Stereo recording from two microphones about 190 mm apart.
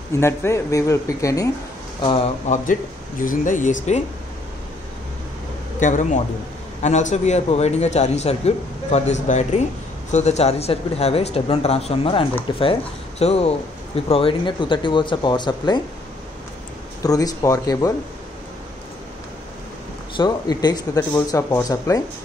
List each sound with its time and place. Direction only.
0.2 s speech: 15° left (ahead or behind)
2.0 s speech: 30° left (ahead or behind); by 3.7 s 45° left (ahead or behind)
5.8 s a man's voice: 40° left (ahead or behind); by 15.8 s 25° left (ahead or behind)
17.0 s speech: 20° left (ahead or behind)
20.2 s speech: 20° left (ahead or behind)